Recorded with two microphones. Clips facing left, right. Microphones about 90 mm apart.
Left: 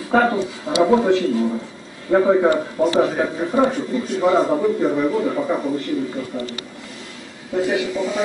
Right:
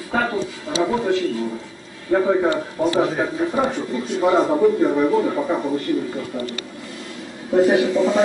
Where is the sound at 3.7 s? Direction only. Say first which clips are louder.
Left 2 dB; centre (ahead or behind).